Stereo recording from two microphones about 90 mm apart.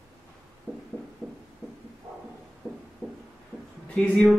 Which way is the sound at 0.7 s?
20° right (ahead or behind).